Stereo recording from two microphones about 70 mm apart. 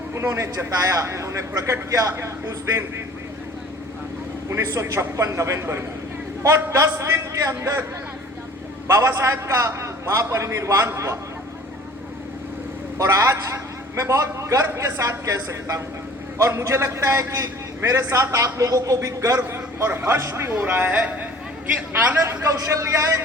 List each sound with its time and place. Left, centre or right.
0.1 s a man's voice: right
4.4 s a man's voice: right
8.9 s a man's voice: right
13.0 s a man's voice: right
19.8 s a man's voice: right
20.5 s speech: right
22.1 s a man's voice: right